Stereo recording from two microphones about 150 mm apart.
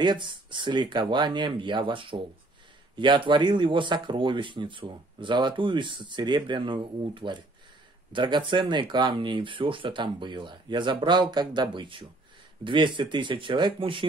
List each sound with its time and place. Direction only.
0.0 s speech: 30° right (ahead or behind)